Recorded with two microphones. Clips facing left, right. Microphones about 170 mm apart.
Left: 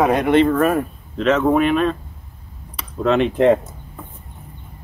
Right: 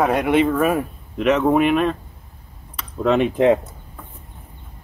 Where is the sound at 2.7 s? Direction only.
Centre (ahead or behind).